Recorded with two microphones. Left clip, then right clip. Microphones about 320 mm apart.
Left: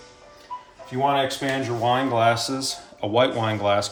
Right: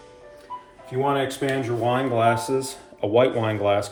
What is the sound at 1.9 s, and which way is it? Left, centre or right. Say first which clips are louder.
Speech: left 1 dB; centre.